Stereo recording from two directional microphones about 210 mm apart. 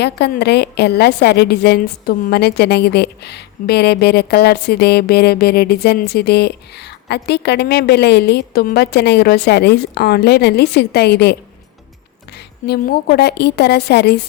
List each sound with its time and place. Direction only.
0.0 s a woman's voice: 50° left (ahead or behind)
12.6 s a woman's voice: 50° left (ahead or behind)